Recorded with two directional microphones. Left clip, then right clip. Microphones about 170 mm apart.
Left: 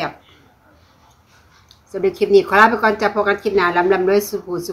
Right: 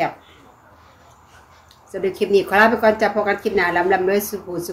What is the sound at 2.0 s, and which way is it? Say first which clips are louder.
A woman's voice: left 4 dB; 15° left (ahead or behind).